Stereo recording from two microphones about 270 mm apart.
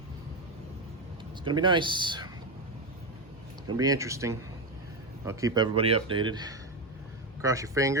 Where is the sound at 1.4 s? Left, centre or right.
Centre.